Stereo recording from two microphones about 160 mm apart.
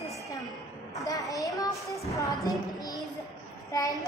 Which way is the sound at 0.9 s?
20° left (ahead or behind).